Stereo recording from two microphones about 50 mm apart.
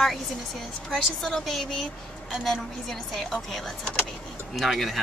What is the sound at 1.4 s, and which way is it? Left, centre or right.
A woman's voice, centre.